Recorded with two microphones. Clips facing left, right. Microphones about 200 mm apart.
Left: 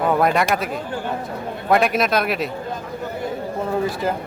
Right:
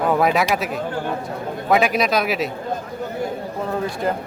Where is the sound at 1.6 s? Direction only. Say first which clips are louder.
Even; centre (ahead or behind).